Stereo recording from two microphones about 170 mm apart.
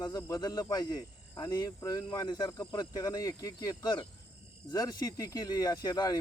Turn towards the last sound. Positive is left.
turn(degrees=25)  # may be behind; listen again after turning